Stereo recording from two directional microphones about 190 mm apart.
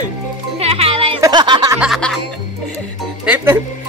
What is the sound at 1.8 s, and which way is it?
Speech, centre (ahead or behind).